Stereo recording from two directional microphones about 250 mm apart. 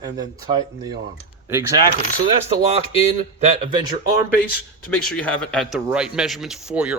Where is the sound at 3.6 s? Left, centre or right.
Centre.